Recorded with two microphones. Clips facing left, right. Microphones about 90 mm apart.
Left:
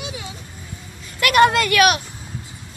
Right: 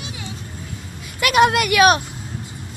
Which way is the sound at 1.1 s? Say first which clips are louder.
Left 1 dB; 15° right (ahead or behind).